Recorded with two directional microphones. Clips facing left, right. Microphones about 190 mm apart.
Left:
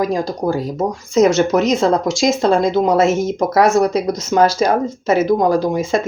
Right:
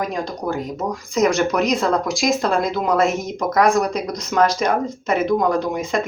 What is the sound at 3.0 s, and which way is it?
Speech, centre (ahead or behind).